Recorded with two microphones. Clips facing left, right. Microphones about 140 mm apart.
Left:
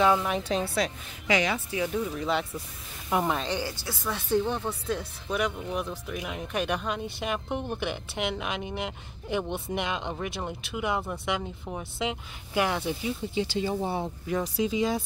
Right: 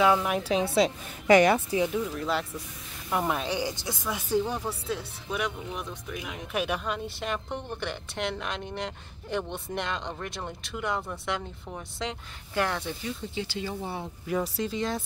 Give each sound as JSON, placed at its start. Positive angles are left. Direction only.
{"t": 0.0, "sound": "a woman's voice", "side_deg": -5}
{"t": 1.2, "sound": "speech", "side_deg": -50}
{"t": 1.9, "sound": "speech", "side_deg": -5}
{"t": 13.3, "sound": "speech", "side_deg": 20}
{"t": 14.2, "sound": "speech", "side_deg": 0}